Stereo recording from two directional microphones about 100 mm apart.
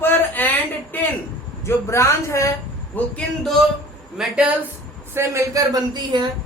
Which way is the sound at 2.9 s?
20° left (ahead or behind).